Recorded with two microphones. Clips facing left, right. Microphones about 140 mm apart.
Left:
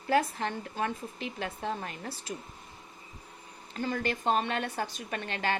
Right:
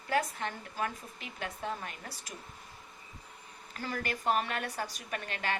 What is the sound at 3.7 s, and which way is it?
A woman's voice, 25° left (ahead or behind).